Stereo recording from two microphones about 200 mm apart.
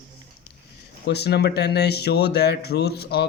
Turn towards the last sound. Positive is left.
turn(degrees=55)  # may be behind; listen again after turning